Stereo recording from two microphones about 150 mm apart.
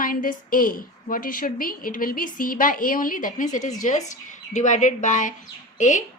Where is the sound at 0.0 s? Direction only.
70° left (ahead or behind).